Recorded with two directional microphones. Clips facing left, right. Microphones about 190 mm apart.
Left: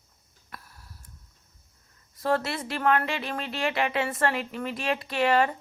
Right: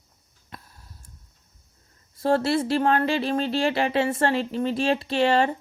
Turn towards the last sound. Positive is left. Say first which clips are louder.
# right 3 dB
turn(degrees=-30)  # may be behind; listen again after turning